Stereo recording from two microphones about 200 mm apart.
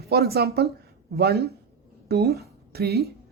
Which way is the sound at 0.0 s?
50° right (ahead or behind).